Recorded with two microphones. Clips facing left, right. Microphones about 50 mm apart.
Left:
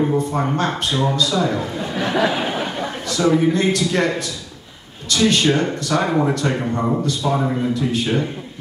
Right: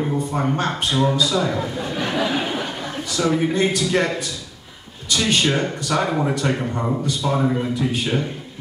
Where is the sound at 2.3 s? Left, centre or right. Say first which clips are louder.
Left 1 dB; centre.